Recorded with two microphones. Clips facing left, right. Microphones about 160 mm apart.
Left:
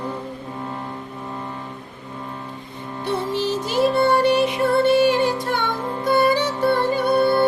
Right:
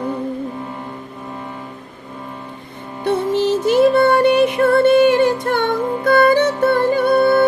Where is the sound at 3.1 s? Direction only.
55° right (ahead or behind).